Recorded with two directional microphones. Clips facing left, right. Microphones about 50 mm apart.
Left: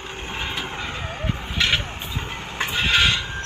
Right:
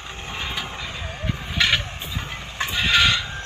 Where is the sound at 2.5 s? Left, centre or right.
Left.